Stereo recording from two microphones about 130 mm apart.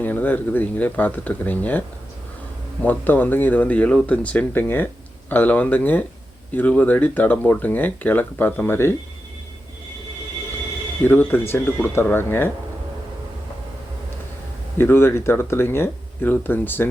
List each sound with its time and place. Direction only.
0.0 s speech: 15° left (ahead or behind)
2.8 s speech: 15° left (ahead or behind)
11.0 s speech: 15° left (ahead or behind)
14.8 s speech: 20° left (ahead or behind)